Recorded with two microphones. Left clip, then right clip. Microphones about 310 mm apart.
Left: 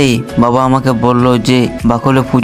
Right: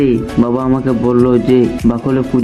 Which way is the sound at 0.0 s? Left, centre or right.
Left.